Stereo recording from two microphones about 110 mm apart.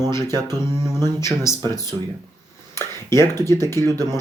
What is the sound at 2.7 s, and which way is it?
Speech, 25° left (ahead or behind).